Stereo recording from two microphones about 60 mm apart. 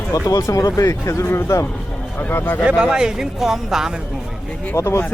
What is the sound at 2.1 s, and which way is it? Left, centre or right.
Speech, left.